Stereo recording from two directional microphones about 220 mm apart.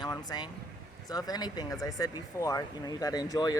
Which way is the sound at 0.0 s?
20° left (ahead or behind).